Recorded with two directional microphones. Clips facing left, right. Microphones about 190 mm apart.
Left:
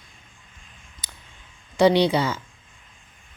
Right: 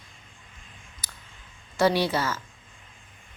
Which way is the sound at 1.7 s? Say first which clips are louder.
Left 5 dB; 20° left (ahead or behind).